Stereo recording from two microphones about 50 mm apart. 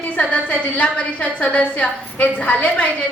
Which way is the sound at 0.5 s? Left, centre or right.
Left.